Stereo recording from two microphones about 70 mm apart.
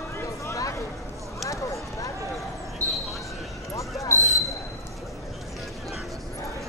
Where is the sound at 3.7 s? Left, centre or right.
Left.